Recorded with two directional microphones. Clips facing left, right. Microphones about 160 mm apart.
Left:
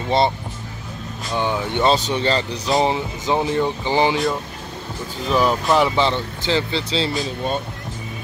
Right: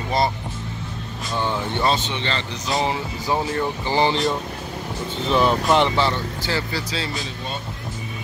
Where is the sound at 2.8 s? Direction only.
25° left (ahead or behind).